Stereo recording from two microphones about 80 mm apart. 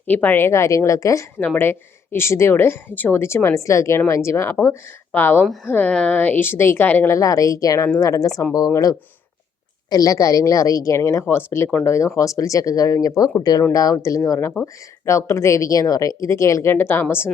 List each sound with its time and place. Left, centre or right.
0.1 s a woman's voice: left
1.5 s a woman's voice: left
5.1 s speech: left
7.1 s a woman's voice: left
13.7 s a woman's voice: left